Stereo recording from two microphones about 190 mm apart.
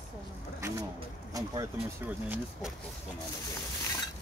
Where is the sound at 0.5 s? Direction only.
15° right (ahead or behind).